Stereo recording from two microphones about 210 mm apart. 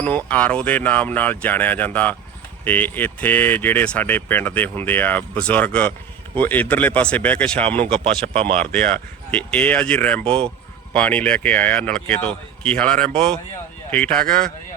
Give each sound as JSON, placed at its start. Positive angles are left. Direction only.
{"t": 0.3, "sound": "speech", "side_deg": 5}
{"t": 7.9, "sound": "speech", "side_deg": -25}
{"t": 8.6, "sound": "speech", "side_deg": 5}